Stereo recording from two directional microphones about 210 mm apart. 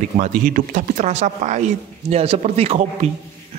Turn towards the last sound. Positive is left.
turn(degrees=-30)  # may be behind; listen again after turning